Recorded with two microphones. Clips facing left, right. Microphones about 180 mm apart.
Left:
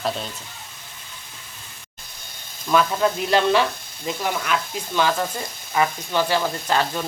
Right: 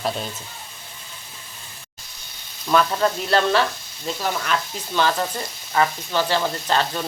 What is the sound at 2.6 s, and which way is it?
Speech, 5° left (ahead or behind).